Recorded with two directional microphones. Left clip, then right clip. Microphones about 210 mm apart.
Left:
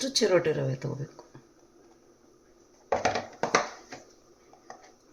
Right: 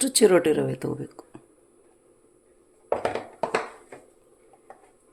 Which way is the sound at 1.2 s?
55° right (ahead or behind).